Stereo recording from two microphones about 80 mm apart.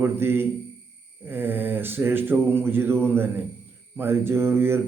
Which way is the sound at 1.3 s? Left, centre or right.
Right.